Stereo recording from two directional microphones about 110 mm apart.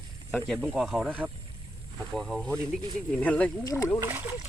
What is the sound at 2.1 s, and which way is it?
Speech, 5° left (ahead or behind).